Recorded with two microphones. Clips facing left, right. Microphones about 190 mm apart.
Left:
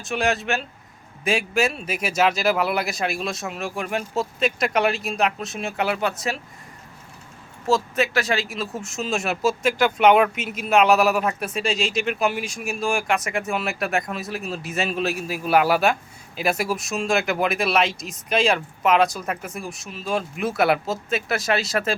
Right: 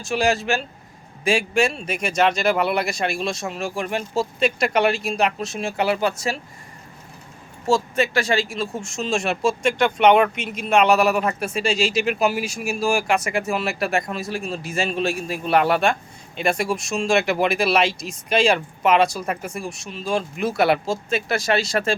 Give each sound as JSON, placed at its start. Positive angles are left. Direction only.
{"t": 0.0, "sound": "speech", "side_deg": 0}
{"t": 7.7, "sound": "speech", "side_deg": 0}